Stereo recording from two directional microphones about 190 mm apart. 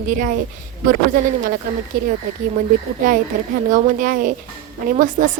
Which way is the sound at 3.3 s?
45° right (ahead or behind).